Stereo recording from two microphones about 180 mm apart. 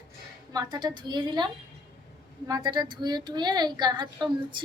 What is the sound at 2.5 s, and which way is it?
A woman's voice, 25° right (ahead or behind).